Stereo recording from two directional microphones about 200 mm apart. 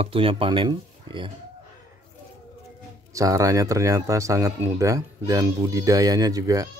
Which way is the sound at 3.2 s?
15° right (ahead or behind).